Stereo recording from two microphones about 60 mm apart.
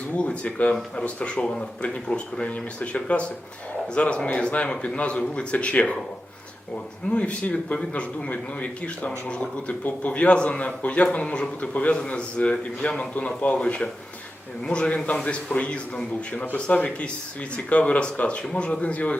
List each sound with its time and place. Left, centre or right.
0.2 s a man's voice: left
7.1 s a man's voice: left
13.6 s a man's voice: centre